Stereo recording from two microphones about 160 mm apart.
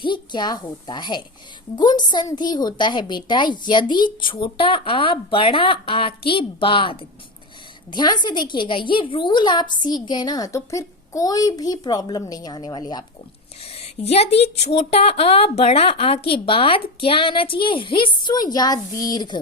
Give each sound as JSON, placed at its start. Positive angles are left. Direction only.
{"t": 0.0, "sound": "a woman's voice", "side_deg": 30}
{"t": 13.7, "sound": "a woman's voice", "side_deg": 40}